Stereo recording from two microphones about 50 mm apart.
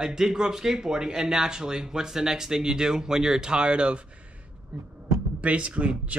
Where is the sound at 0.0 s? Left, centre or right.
Centre.